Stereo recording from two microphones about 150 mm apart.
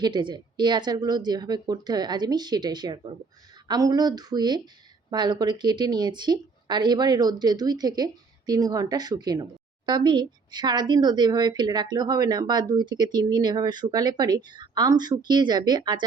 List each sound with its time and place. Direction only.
0.0 s speech: 30° right (ahead or behind)